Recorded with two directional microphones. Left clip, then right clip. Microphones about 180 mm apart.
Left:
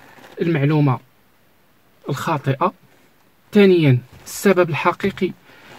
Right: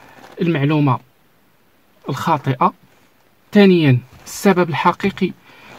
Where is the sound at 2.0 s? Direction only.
35° right (ahead or behind).